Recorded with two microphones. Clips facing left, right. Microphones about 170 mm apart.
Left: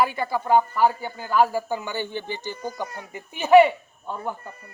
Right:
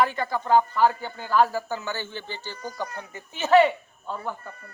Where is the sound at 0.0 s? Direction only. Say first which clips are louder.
Left 1 dB; 10° left (ahead or behind).